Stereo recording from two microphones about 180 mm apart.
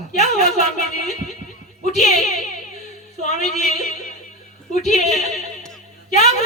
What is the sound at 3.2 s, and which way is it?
Singing, 40° left (ahead or behind).